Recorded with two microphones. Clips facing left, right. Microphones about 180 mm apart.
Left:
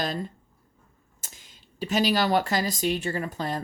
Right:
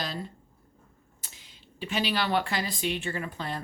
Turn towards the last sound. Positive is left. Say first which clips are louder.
# left 4 dB
turn(degrees=40)  # may be behind; listen again after turning